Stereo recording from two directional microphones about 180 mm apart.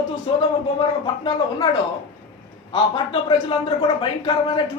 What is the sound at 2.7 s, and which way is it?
A man's voice, 30° left (ahead or behind).